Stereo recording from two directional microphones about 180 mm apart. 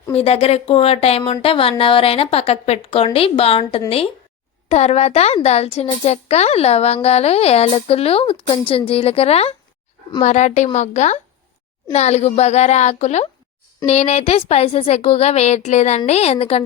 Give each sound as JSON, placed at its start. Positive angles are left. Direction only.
{"t": 0.1, "sound": "a woman's voice", "side_deg": 35}